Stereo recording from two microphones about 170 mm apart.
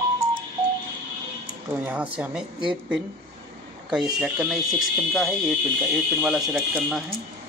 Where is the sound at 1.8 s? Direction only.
5° right (ahead or behind).